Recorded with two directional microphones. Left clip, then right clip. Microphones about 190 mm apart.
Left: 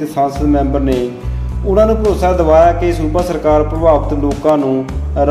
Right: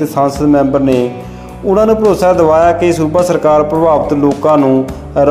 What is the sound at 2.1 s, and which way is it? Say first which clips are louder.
A man's voice: right 3 dB; 45° right (ahead or behind).